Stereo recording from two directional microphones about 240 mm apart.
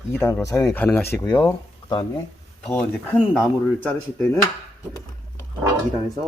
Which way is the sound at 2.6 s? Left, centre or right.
Centre.